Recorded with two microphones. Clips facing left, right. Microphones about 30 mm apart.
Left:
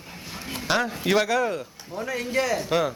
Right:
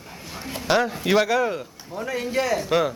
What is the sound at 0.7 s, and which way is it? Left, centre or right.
A man's voice, centre.